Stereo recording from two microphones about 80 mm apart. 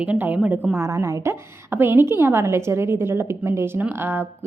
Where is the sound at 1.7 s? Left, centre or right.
Right.